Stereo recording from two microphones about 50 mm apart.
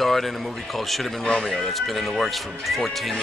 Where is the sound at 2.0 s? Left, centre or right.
Centre.